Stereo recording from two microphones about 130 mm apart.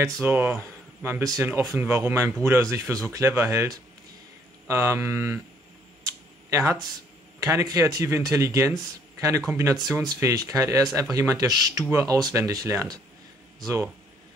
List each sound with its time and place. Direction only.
0.0 s speech: 15° right (ahead or behind)
6.5 s speech: 20° right (ahead or behind)